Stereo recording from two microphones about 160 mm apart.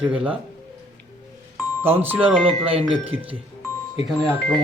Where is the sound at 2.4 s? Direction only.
35° right (ahead or behind).